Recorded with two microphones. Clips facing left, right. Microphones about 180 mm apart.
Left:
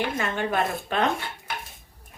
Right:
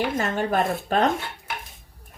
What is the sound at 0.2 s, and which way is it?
Speech, 40° right (ahead or behind).